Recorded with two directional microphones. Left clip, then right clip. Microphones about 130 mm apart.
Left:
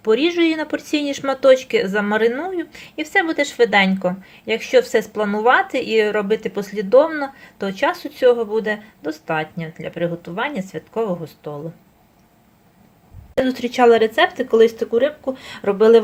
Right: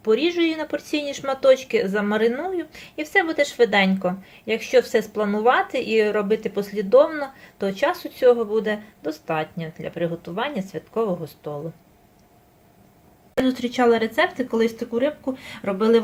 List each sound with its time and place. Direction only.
0.0 s speech: 25° left (ahead or behind); by 11.6 s 5° left (ahead or behind)
13.4 s speech: 35° left (ahead or behind)